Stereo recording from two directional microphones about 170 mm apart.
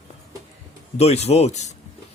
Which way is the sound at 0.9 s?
40° left (ahead or behind).